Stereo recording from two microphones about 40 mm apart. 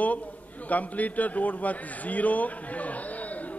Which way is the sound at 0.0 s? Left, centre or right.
Left.